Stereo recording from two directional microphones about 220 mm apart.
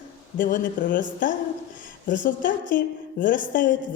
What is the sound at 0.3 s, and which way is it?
Speech, 40° left (ahead or behind).